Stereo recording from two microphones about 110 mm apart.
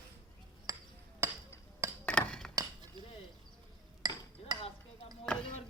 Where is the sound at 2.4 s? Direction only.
5° left (ahead or behind).